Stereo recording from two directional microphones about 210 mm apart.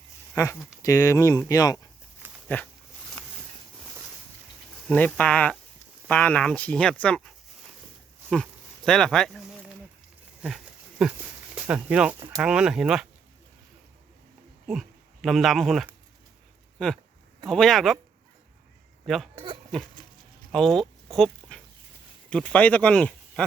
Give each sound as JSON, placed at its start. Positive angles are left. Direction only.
{"t": 0.4, "sound": "speech", "side_deg": 15}
{"t": 4.9, "sound": "speech", "side_deg": 5}
{"t": 8.3, "sound": "a sound", "side_deg": 5}
{"t": 11.5, "sound": "speech", "side_deg": -5}
{"t": 14.7, "sound": "speech", "side_deg": 0}
{"t": 19.0, "sound": "speech", "side_deg": 0}
{"t": 20.5, "sound": "a sound", "side_deg": 0}
{"t": 22.3, "sound": "speech", "side_deg": 5}